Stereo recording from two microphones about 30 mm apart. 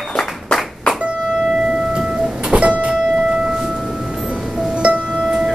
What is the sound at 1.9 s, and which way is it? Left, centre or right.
Guitar, right.